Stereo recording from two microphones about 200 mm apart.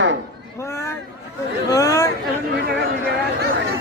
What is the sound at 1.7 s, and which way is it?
Speech, 15° left (ahead or behind).